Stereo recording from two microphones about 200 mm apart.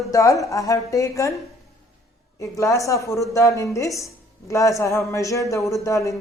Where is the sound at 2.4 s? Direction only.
15° left (ahead or behind).